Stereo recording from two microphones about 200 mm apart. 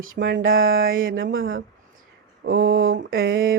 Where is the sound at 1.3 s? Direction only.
80° right.